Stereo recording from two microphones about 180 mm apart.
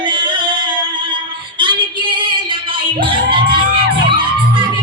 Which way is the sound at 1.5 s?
25° right (ahead or behind).